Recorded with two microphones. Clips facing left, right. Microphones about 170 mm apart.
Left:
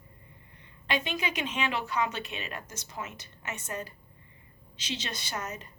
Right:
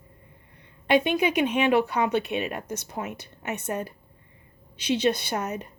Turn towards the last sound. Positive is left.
turn(degrees=-60)  # may be behind; listen again after turning